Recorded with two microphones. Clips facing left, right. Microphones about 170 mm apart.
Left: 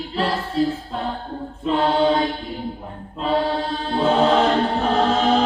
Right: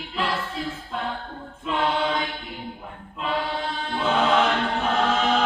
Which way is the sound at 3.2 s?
35° left (ahead or behind).